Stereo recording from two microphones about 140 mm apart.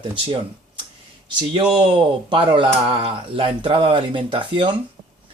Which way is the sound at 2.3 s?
35° right (ahead or behind).